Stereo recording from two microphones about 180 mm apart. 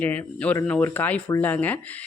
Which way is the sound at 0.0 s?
10° left (ahead or behind).